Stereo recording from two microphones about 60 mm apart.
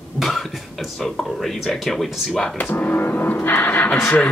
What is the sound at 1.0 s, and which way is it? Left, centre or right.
Speech, centre.